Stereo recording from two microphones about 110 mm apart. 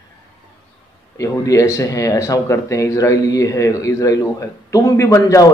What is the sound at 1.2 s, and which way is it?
Speech, 30° left (ahead or behind).